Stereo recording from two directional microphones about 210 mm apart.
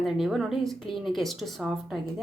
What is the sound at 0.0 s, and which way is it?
A woman's voice, centre (ahead or behind).